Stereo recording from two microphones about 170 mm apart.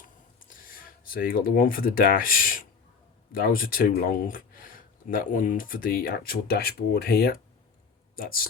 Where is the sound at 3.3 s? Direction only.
60° left (ahead or behind).